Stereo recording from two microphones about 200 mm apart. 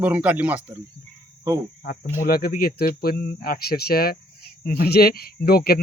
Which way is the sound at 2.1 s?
50° left (ahead or behind).